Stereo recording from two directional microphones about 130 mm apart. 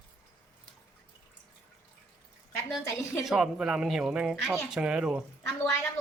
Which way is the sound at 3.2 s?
5° right (ahead or behind).